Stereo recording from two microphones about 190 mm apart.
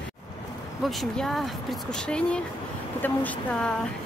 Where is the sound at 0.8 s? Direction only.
Centre (ahead or behind).